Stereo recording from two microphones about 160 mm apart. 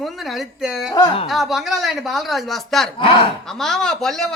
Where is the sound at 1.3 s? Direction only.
Centre (ahead or behind).